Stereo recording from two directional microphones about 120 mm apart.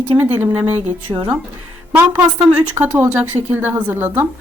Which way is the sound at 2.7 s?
20° right (ahead or behind).